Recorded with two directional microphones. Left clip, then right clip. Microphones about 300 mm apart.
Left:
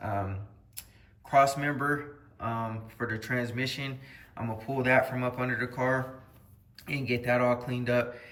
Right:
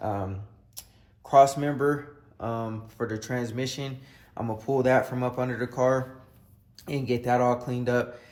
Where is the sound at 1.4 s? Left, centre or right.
Centre.